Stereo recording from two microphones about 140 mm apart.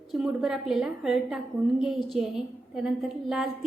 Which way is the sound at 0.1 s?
5° right (ahead or behind).